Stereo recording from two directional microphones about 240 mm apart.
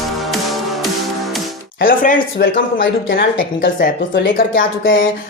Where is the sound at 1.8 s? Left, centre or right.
Left.